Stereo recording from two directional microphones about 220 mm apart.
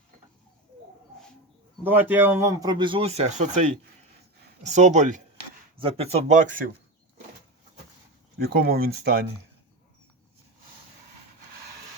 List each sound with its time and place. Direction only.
1.8 s a man's voice: 10° right (ahead or behind); by 6.7 s 35° right (ahead or behind)
8.4 s speech: 45° right (ahead or behind)